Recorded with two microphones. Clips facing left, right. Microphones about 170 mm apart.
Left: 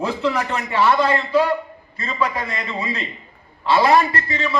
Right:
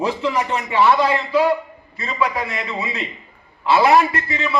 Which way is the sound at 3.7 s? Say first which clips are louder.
Right 1 dB; 5° right (ahead or behind).